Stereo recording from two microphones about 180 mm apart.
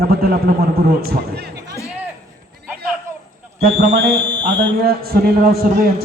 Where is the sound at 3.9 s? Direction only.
65° right (ahead or behind).